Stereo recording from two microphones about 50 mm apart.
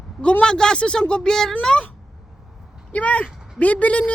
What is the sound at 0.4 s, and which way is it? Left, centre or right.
Speech, centre.